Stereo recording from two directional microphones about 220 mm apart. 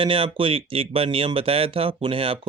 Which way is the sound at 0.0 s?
25° right (ahead or behind).